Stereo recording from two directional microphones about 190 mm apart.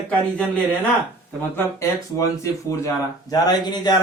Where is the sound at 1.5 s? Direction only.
15° left (ahead or behind).